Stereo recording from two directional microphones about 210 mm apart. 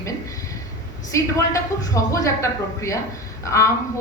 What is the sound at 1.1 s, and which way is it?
A woman's voice, 15° left (ahead or behind).